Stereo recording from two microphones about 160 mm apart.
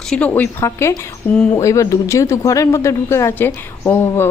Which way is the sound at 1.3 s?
5° left (ahead or behind).